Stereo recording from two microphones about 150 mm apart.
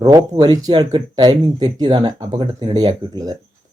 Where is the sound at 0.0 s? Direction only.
30° right (ahead or behind).